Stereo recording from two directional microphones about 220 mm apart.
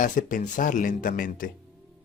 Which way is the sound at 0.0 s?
35° left (ahead or behind).